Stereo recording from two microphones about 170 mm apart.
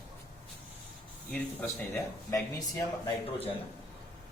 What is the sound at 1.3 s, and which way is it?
Speech, 10° left (ahead or behind).